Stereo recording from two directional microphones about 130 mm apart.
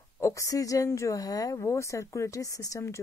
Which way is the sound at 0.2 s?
25° left (ahead or behind).